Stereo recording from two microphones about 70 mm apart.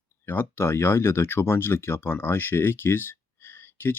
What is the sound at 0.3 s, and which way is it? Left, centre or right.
Speech, left.